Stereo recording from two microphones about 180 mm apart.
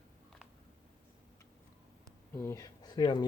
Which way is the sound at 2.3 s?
15° left (ahead or behind).